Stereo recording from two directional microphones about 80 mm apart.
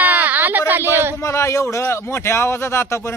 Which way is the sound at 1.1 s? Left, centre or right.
Left.